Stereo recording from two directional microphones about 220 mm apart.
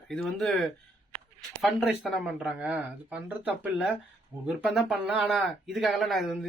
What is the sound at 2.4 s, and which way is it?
Speech, 5° right (ahead or behind).